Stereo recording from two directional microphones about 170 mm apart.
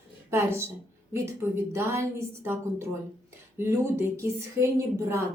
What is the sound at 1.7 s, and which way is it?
A woman's voice, 15° right (ahead or behind).